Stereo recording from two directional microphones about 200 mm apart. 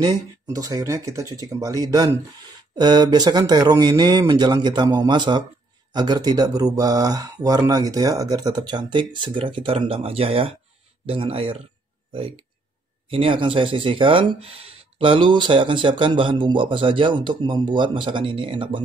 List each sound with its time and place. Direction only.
0.0 s speech: 20° right (ahead or behind)